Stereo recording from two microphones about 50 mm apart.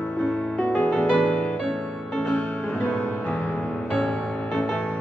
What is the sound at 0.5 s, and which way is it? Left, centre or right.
Music, left.